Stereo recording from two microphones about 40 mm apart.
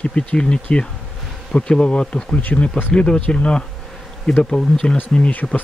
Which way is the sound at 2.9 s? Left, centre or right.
Left.